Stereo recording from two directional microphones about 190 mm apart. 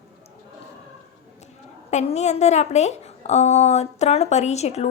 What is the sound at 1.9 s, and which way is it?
A woman's voice, 35° left (ahead or behind).